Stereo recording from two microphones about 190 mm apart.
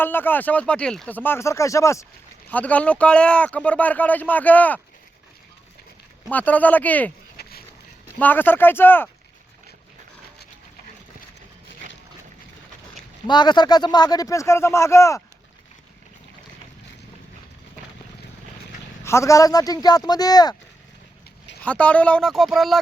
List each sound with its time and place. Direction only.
0.0 s speech: 10° left (ahead or behind)
6.2 s speech: 10° left (ahead or behind)
7.4 s a sound: 55° left (ahead or behind)
8.2 s speech: 10° left (ahead or behind)
13.2 s speech: 25° left (ahead or behind)
19.0 s speech: 15° left (ahead or behind)
21.6 s speech: 5° left (ahead or behind)